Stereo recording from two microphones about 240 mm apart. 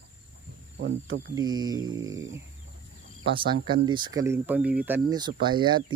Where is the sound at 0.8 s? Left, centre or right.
Right.